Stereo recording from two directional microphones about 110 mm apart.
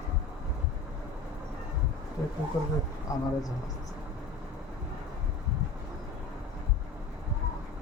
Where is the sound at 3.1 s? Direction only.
30° left (ahead or behind).